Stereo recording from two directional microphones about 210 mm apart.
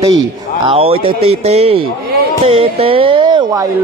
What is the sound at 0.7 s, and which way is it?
Speech, 25° right (ahead or behind).